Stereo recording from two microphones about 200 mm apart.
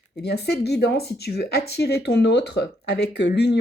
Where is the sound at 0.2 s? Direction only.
55° left (ahead or behind).